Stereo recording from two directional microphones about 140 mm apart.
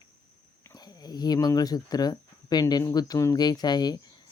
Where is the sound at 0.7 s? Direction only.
30° left (ahead or behind).